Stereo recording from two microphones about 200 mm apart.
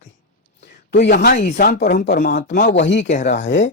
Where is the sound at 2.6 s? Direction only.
60° left (ahead or behind).